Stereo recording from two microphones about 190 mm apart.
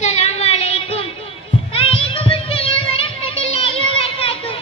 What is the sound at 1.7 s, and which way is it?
Child singing, 30° left (ahead or behind).